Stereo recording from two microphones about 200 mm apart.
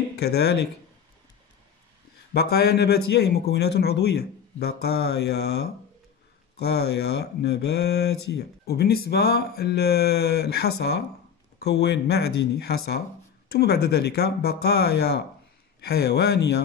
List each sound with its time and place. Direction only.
0.2 s speech: 55° left (ahead or behind)
2.3 s speech: 50° left (ahead or behind)
6.6 s speech: 55° left (ahead or behind)